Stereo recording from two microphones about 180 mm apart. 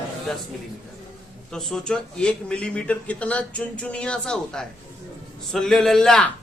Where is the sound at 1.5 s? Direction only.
Centre (ahead or behind).